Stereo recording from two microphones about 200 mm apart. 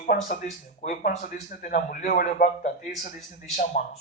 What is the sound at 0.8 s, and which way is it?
Speech, 40° left (ahead or behind).